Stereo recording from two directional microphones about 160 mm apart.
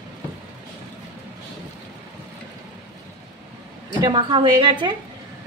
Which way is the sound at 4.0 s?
30° right (ahead or behind).